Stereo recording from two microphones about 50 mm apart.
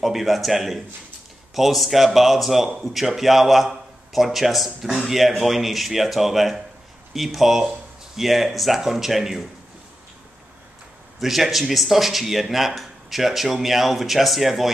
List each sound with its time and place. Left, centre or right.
0.0 s speech: centre
11.1 s speech: centre